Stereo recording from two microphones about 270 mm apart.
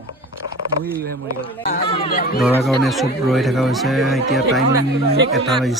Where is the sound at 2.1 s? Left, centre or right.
Left.